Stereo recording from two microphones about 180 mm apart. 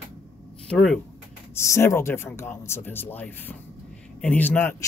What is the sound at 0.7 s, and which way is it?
Speech, 5° left (ahead or behind).